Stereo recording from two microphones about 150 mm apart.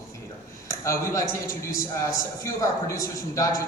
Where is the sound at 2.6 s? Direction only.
20° left (ahead or behind).